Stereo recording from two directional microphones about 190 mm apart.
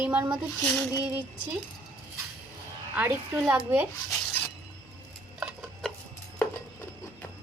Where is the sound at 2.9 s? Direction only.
10° right (ahead or behind).